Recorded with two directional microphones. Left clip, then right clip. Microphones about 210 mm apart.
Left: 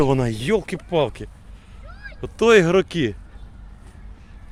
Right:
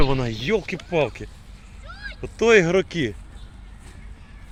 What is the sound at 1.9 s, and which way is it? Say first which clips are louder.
Cat: right 4 dB; 30° left (ahead or behind).